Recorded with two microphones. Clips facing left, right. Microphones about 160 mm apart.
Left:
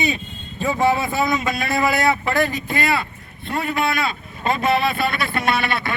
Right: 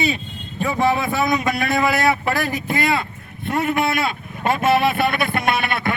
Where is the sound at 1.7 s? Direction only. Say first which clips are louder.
Even; centre (ahead or behind); by 4.1 s 25° right (ahead or behind).